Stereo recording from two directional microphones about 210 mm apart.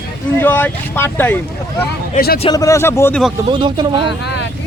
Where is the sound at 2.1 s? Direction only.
45° left (ahead or behind).